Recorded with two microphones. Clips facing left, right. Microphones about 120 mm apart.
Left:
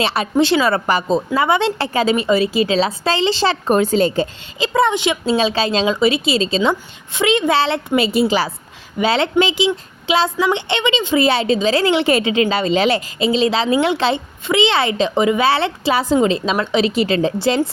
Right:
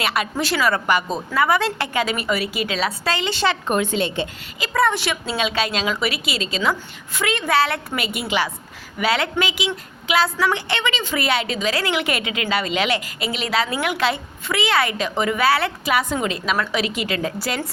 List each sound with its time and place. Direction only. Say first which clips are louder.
0.0 s a woman's voice: left 7 dB; 30° left (ahead or behind)
4.6 s a woman's voice: left 4 dB; 20° left (ahead or behind)
5.4 s a woman's voice: left 5 dB; 30° left (ahead or behind)